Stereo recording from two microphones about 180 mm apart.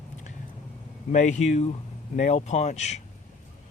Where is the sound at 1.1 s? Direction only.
40° left (ahead or behind).